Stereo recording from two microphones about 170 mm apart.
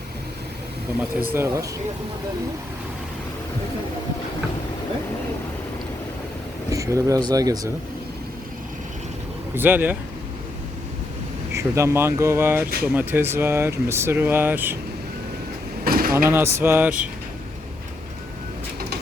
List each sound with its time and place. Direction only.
1.3 s speech: 15° right (ahead or behind)
6.7 s speech: 20° right (ahead or behind)
9.6 s speech: 10° right (ahead or behind)
11.5 s speech: 15° right (ahead or behind)
15.8 s vehicle: 60° right (ahead or behind)
16.1 s speech: 15° right (ahead or behind)